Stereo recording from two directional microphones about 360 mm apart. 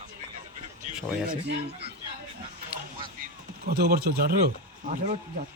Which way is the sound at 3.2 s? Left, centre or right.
Right.